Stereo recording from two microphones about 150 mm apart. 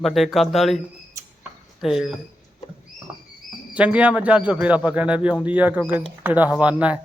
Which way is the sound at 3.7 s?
10° right (ahead or behind).